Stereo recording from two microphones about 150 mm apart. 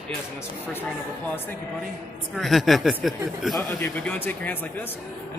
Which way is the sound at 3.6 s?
10° left (ahead or behind).